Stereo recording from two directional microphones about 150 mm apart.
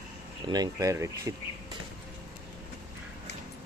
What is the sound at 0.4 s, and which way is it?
Speech, 25° right (ahead or behind).